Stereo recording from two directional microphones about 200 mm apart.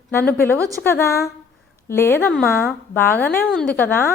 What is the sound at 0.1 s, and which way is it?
A woman's voice, 10° left (ahead or behind).